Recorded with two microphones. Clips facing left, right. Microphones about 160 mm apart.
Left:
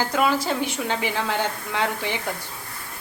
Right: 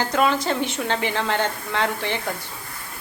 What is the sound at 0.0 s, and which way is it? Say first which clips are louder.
Speech: right 1 dB; 10° left (ahead or behind).